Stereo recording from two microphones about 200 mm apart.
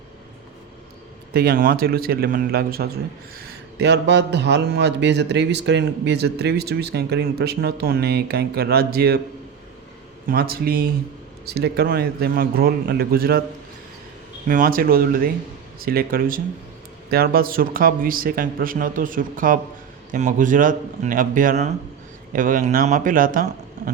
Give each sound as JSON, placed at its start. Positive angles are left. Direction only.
{"t": 1.3, "sound": "a man's voice", "side_deg": -50}
{"t": 10.2, "sound": "a man's voice", "side_deg": -50}
{"t": 14.4, "sound": "a man's voice", "side_deg": -45}